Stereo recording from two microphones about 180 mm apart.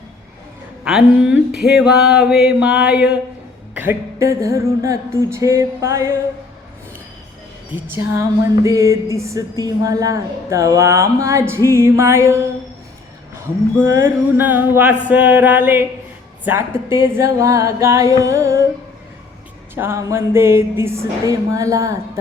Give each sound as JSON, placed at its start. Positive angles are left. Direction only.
{"t": 0.9, "sound": "mantra", "side_deg": -5}
{"t": 3.8, "sound": "a woman's voice", "side_deg": -15}
{"t": 7.9, "sound": "a woman's voice", "side_deg": -15}
{"t": 13.7, "sound": "a woman's voice", "side_deg": -10}
{"t": 19.7, "sound": "a woman's voice", "side_deg": -15}